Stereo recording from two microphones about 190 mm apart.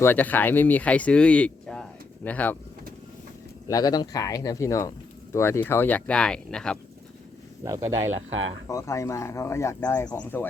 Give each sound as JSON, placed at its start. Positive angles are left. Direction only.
{"t": 0.0, "sound": "speech", "side_deg": 10}
{"t": 3.7, "sound": "speech", "side_deg": 20}
{"t": 7.6, "sound": "speech", "side_deg": -15}
{"t": 8.6, "sound": "speech", "side_deg": 15}